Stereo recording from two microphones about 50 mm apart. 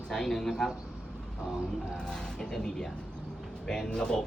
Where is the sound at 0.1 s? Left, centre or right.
Centre.